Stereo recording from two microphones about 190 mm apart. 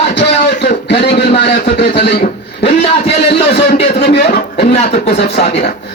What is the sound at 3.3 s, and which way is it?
Speech, 60° left (ahead or behind).